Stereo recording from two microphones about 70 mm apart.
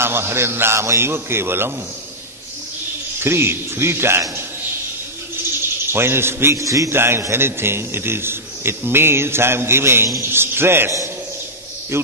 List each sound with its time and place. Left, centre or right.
0.0 s a man's voice: right
3.2 s a man's voice: right
5.9 s a man's voice: right
6.6 s a man's voice: right
7.0 s a man's voice: right
11.9 s a man's voice: right